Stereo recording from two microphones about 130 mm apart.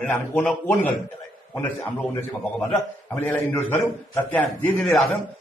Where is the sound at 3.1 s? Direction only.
15° left (ahead or behind).